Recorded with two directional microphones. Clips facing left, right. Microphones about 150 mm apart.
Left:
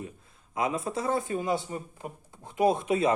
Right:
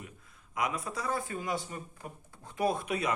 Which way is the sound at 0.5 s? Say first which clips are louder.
Left 5 dB; 25° left (ahead or behind).